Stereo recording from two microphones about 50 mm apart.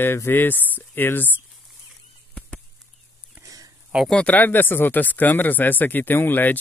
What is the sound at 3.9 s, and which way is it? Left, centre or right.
Speech, right.